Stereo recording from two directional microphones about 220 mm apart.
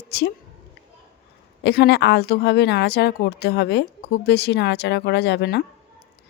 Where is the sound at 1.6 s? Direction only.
50° left (ahead or behind).